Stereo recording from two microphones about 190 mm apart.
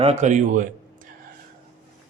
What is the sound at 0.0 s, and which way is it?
Speech, 35° right (ahead or behind).